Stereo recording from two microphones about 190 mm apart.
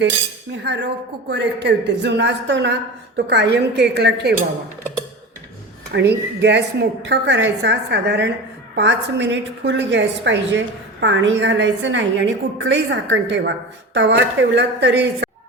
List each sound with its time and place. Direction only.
0.6 s a woman's voice: 65° right (ahead or behind)
5.9 s a woman's voice: 65° right (ahead or behind)